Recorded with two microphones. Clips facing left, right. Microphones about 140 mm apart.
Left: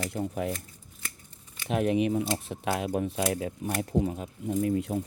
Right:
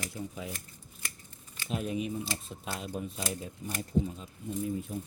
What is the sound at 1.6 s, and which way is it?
Speech, 65° left (ahead or behind).